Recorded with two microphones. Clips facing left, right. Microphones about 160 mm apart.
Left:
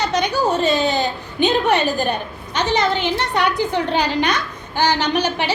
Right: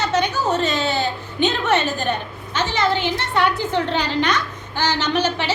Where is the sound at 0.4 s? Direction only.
10° left (ahead or behind).